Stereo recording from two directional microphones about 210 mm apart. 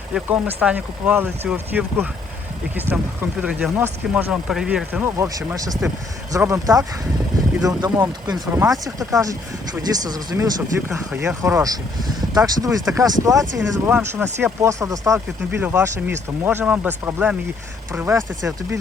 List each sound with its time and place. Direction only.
0.1 s speech: 5° right (ahead or behind)